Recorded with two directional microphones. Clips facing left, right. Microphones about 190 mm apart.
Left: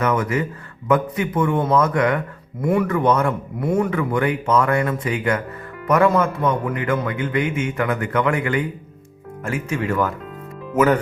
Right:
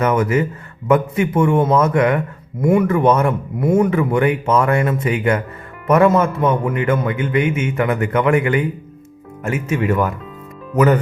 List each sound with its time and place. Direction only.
0.0 s a man's voice: 25° right (ahead or behind)